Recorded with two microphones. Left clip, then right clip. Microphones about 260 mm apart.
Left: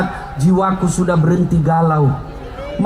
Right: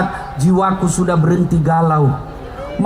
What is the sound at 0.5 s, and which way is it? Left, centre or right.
A man's voice, right.